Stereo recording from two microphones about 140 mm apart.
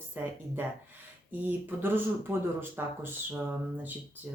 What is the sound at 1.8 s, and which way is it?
Speech, 15° right (ahead or behind).